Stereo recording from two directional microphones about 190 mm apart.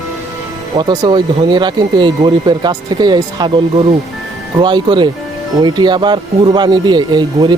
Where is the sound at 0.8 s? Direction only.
25° right (ahead or behind).